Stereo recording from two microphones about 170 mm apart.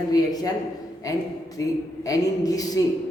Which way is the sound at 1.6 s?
20° left (ahead or behind).